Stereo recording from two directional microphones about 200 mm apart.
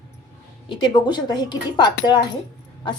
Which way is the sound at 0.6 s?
25° left (ahead or behind).